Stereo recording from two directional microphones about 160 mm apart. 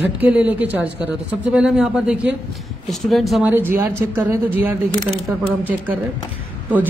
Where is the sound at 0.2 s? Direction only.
10° right (ahead or behind).